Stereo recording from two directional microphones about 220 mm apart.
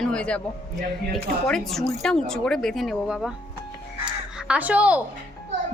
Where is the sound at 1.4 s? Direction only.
Centre (ahead or behind).